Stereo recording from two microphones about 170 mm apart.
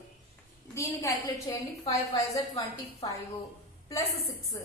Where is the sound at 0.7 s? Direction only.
15° left (ahead or behind).